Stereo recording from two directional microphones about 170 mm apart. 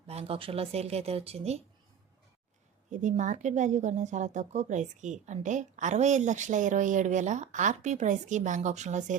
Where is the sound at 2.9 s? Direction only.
45° right (ahead or behind).